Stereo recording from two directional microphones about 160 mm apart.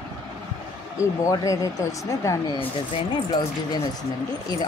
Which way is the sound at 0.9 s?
20° left (ahead or behind).